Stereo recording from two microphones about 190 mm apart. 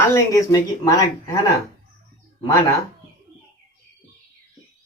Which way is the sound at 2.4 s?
20° left (ahead or behind).